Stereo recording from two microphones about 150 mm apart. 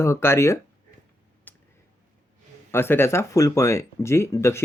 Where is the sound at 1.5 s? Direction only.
10° left (ahead or behind).